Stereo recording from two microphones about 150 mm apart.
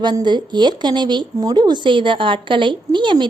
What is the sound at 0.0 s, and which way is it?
Speech, 30° right (ahead or behind).